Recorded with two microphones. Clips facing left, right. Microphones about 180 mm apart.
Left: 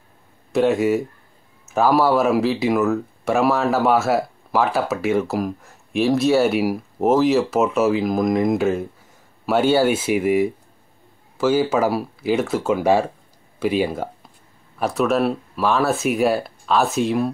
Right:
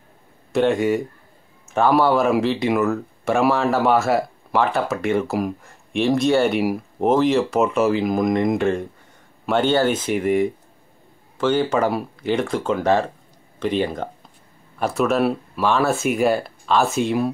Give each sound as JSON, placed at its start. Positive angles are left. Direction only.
{"t": 0.5, "sound": "speech", "side_deg": 0}